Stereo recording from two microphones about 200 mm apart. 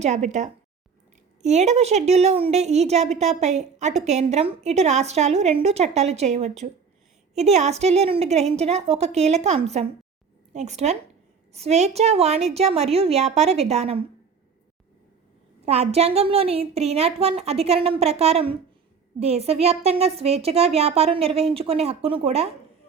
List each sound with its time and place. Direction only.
0.0 s a woman's voice: 35° right (ahead or behind)
15.6 s a woman's voice: 30° right (ahead or behind)